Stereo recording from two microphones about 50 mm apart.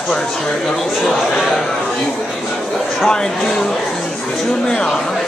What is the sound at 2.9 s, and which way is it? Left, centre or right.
Speech, centre.